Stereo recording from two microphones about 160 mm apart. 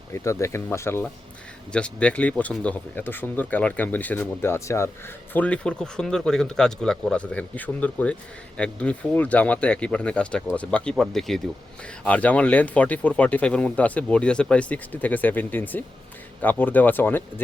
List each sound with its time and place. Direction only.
0.1 s speech: 20° left (ahead or behind)